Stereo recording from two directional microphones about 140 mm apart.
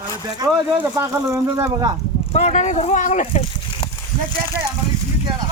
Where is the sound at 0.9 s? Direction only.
25° right (ahead or behind).